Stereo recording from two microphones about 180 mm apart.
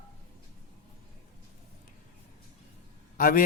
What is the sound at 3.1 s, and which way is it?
Speech, 50° left (ahead or behind).